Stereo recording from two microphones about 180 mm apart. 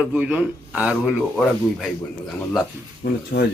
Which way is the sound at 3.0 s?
60° left (ahead or behind).